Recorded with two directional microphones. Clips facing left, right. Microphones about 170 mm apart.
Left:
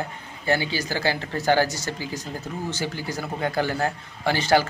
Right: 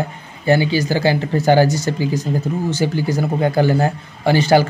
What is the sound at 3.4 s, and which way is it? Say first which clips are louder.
Speech: right 7 dB; 20° right (ahead or behind).